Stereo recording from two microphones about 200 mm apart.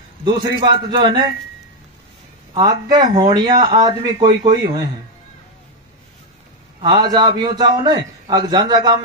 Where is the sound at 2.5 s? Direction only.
20° right (ahead or behind).